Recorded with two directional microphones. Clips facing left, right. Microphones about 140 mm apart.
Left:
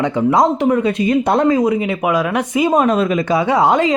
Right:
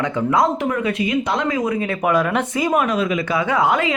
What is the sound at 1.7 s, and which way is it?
Speech, 10° left (ahead or behind).